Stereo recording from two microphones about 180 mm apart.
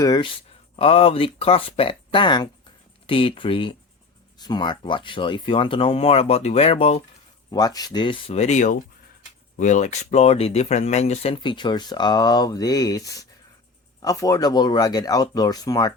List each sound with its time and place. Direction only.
0.0 s speech: 25° left (ahead or behind)
7.5 s speech: 20° left (ahead or behind)